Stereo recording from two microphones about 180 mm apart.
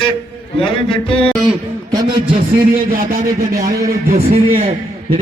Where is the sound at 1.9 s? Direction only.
20° right (ahead or behind).